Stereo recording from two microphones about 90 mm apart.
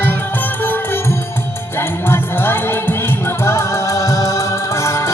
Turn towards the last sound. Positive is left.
turn(degrees=30)  # may be behind; listen again after turning